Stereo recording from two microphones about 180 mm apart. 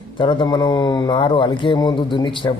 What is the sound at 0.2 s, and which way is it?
A man's voice, 25° left (ahead or behind).